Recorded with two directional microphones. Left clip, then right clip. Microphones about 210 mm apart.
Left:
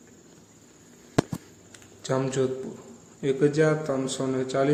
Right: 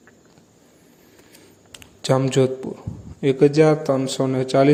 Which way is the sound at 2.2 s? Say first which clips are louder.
Right 7 dB; 30° right (ahead or behind).